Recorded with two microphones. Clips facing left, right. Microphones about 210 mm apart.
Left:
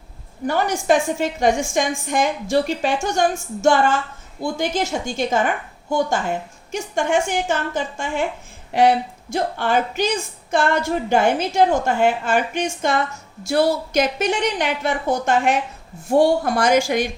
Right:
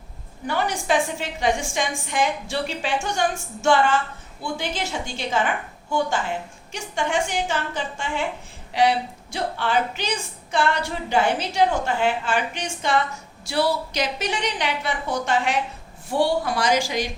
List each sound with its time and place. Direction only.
0.4 s a woman's voice: 45° left (ahead or behind)
6.7 s a woman's voice: 45° left (ahead or behind)